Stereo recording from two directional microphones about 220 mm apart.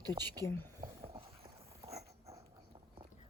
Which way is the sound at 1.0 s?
25° right (ahead or behind).